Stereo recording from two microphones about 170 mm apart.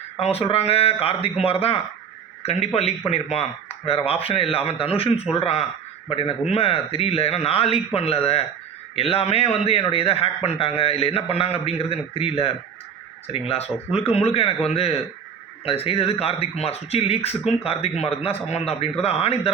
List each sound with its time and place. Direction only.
0.2 s a man's voice: 35° left (ahead or behind)